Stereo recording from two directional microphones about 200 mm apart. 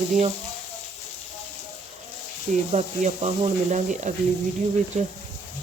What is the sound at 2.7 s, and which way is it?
Speech, 35° right (ahead or behind).